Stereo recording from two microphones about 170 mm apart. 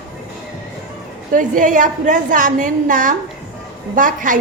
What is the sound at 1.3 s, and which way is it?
A woman's voice, 50° right (ahead or behind).